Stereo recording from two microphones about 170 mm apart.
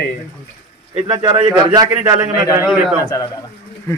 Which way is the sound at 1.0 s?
25° right (ahead or behind).